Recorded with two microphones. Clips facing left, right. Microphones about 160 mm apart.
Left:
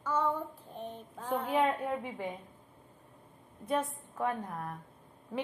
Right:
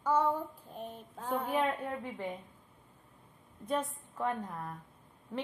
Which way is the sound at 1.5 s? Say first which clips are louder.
Left 5 dB; 10° left (ahead or behind).